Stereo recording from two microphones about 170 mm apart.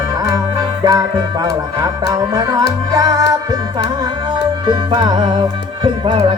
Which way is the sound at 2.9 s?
20° right (ahead or behind).